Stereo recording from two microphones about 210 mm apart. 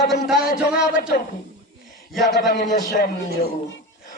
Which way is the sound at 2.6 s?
35° left (ahead or behind).